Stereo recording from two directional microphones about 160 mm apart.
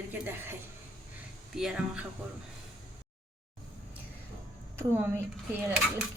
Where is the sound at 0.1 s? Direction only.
15° right (ahead or behind).